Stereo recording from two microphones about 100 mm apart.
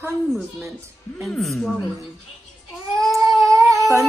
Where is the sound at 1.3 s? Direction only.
5° left (ahead or behind).